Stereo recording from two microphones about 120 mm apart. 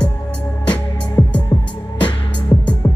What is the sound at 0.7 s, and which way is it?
Music, 40° left (ahead or behind).